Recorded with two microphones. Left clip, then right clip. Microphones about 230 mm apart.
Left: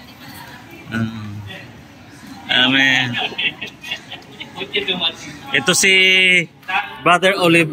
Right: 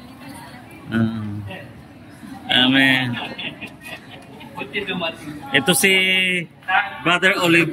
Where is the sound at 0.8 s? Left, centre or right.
Centre.